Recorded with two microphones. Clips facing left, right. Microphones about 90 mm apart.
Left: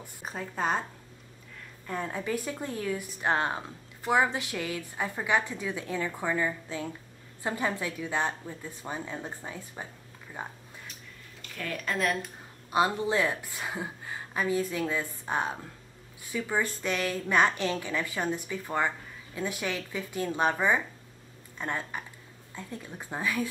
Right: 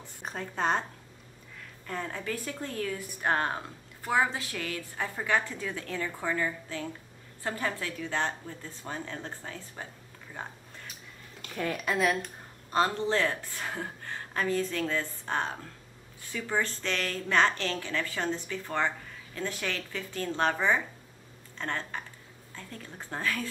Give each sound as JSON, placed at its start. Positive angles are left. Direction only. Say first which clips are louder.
{"t": 0.0, "sound": "speech", "louder": "even", "side_deg": 5}
{"t": 1.9, "sound": "a woman's voice", "louder": "left 3 dB", "side_deg": 15}
{"t": 11.7, "sound": "speech", "louder": "right 1 dB", "side_deg": -5}
{"t": 12.7, "sound": "a woman's voice", "louder": "left 1 dB", "side_deg": 10}